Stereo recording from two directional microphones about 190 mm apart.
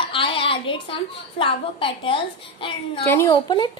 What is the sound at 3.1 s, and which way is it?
Speech, 15° left (ahead or behind).